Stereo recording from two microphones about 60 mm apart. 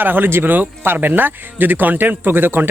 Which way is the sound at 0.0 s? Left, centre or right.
Right.